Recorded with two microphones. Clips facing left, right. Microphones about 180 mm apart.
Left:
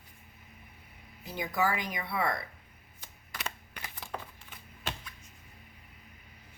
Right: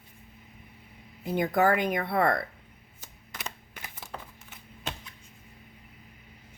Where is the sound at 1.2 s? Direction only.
55° right (ahead or behind).